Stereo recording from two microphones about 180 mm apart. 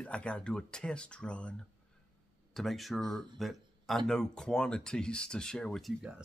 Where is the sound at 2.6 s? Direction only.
Centre (ahead or behind).